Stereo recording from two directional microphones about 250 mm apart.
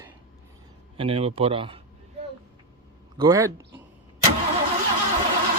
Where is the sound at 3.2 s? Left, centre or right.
Centre.